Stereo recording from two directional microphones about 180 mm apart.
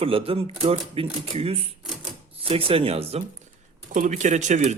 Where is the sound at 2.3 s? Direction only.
30° right (ahead or behind).